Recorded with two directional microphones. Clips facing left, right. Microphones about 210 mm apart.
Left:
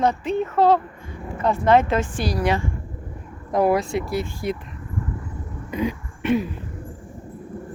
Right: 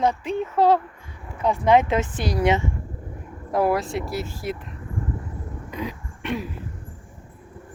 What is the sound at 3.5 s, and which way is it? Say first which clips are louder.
Speech: left 2 dB; centre (ahead or behind).